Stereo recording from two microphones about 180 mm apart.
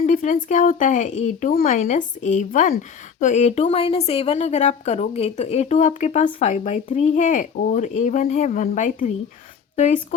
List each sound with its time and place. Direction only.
0.0 s a woman's voice: 45° left (ahead or behind)